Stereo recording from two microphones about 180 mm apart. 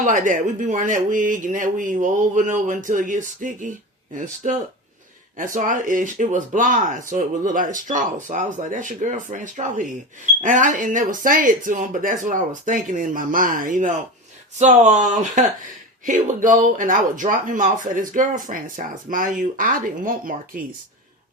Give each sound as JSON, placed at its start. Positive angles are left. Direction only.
{"t": 0.0, "sound": "speech", "side_deg": -45}